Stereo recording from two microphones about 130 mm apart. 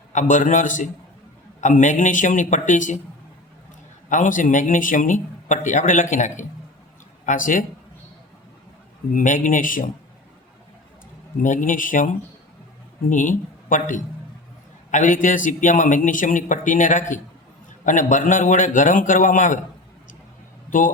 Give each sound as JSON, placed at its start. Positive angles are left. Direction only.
{"t": 0.1, "sound": "a man's voice", "side_deg": 70}
{"t": 4.1, "sound": "a man's voice", "side_deg": 85}
{"t": 7.3, "sound": "speech", "side_deg": 90}
{"t": 9.1, "sound": "a man's voice", "side_deg": 80}
{"t": 11.4, "sound": "speech", "side_deg": 85}
{"t": 13.1, "sound": "a man's voice", "side_deg": 90}
{"t": 20.7, "sound": "a man's voice", "side_deg": 90}